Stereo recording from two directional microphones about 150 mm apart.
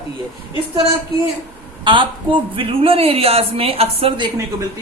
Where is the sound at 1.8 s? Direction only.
35° right (ahead or behind).